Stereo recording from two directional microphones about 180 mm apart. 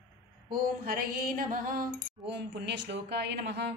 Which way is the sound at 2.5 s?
70° right (ahead or behind).